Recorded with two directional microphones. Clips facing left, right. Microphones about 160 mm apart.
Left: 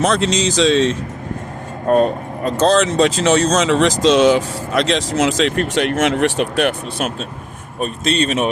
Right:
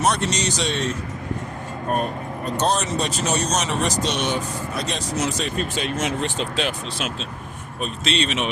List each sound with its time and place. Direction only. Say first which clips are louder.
0.2 s speech: left 8 dB; 90° left; by 7.1 s 60° left (ahead or behind)
7.8 s speech: left 6 dB; 45° left (ahead or behind)